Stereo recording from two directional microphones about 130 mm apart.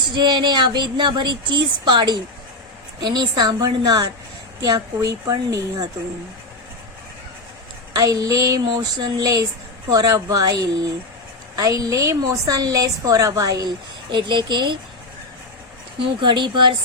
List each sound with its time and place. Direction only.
0.1 s a woman's voice: 35° right (ahead or behind)
7.9 s a woman's voice: 30° right (ahead or behind)
16.0 s a woman's voice: 35° right (ahead or behind)